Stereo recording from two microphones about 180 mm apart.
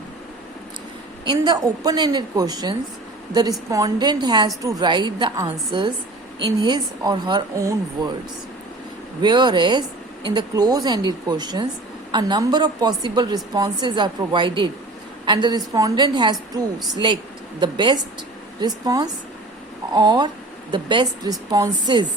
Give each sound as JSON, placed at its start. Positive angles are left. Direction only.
{"t": 1.2, "sound": "a woman's voice", "side_deg": -25}
{"t": 9.2, "sound": "a woman's voice", "side_deg": -25}